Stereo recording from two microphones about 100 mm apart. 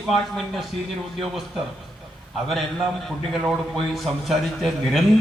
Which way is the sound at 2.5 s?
Centre (ahead or behind).